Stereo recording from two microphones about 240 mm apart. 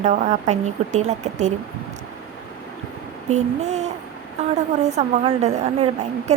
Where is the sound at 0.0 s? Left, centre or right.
Right.